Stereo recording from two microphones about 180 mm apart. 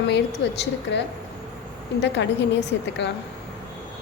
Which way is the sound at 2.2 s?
80° left.